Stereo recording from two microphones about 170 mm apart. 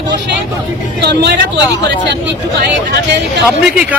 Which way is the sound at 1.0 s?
75° right (ahead or behind).